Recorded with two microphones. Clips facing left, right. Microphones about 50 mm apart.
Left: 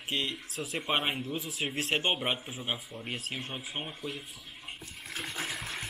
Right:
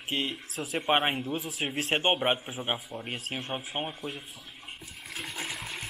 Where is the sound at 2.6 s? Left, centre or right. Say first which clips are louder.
Right 4 dB; right.